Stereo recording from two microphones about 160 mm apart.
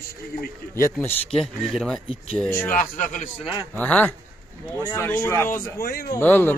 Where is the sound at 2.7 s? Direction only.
55° left (ahead or behind).